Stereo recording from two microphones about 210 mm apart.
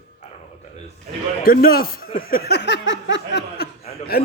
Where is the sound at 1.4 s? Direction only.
45° left (ahead or behind).